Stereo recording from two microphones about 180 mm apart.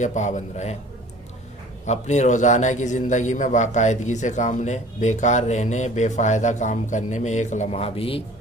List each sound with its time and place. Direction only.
0.0 s a man's voice: 40° left (ahead or behind)
1.9 s a man's voice: 40° left (ahead or behind)